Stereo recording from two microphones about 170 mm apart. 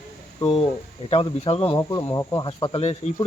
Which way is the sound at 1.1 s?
35° left (ahead or behind).